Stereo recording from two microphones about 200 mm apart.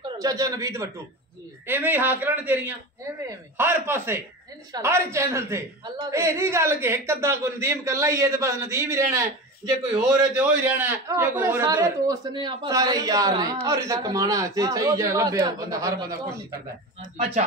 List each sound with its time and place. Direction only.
0.2 s a man's voice: 15° right (ahead or behind)
17.2 s speech: 35° right (ahead or behind)